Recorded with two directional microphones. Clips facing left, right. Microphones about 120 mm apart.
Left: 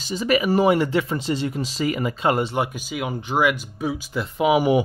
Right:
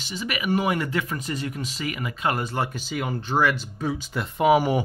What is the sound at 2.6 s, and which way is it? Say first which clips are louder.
Speech: left 3 dB; 10° left (ahead or behind).